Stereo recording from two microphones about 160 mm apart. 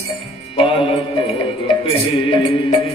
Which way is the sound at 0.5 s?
35° left (ahead or behind).